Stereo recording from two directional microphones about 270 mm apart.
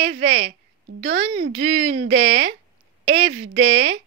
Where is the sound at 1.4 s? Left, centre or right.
Right.